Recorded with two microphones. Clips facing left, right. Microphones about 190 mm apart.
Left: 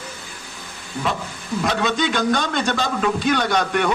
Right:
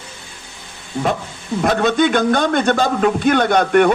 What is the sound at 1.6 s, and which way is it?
A man's voice, 50° right (ahead or behind).